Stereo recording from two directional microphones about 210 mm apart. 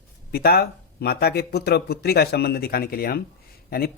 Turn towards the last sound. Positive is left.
turn(degrees=45)  # may be behind; listen again after turning